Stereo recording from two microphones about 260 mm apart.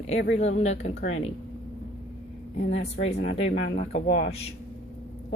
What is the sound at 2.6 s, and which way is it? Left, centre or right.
Speech, left.